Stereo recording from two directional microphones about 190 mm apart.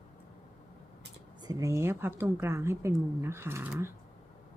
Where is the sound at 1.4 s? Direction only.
15° right (ahead or behind).